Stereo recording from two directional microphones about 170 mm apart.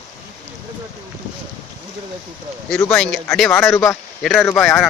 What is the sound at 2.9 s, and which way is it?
A man's voice, centre (ahead or behind).